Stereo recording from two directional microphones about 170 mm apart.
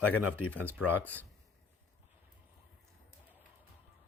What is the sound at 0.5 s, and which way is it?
Speech, 10° left (ahead or behind).